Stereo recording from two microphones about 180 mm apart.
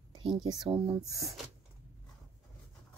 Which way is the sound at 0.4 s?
25° right (ahead or behind).